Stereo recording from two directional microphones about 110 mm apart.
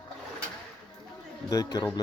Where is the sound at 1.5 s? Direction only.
35° left (ahead or behind).